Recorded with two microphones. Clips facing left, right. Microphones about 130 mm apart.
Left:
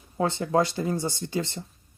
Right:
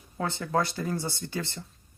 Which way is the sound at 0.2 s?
25° left (ahead or behind).